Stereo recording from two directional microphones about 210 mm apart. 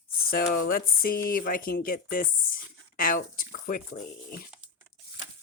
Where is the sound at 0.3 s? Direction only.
45° left (ahead or behind).